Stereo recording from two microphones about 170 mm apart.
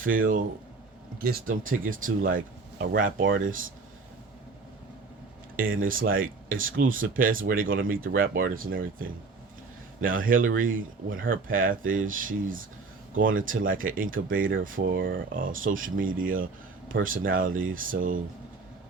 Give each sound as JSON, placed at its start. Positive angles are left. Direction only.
{"t": 0.0, "sound": "speech", "side_deg": -55}
{"t": 5.5, "sound": "speech", "side_deg": -55}
{"t": 15.4, "sound": "speech", "side_deg": -55}